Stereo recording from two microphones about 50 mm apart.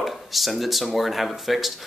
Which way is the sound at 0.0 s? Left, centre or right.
Centre.